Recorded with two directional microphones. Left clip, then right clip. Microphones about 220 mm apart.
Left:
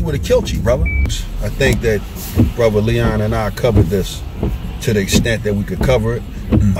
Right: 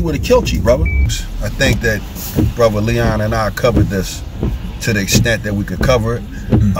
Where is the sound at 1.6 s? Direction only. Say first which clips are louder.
Even; 20° right (ahead or behind).